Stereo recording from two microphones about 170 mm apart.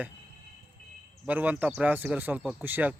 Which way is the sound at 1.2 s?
10° right (ahead or behind).